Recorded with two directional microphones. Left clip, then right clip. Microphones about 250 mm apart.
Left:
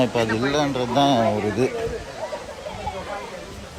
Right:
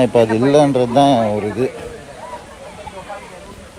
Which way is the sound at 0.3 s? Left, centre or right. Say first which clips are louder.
Right 9 dB; right.